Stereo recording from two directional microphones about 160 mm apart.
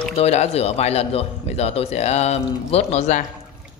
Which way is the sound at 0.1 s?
40° left (ahead or behind).